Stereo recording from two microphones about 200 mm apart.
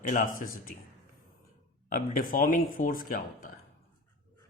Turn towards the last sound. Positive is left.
turn(degrees=40)  # may be behind; listen again after turning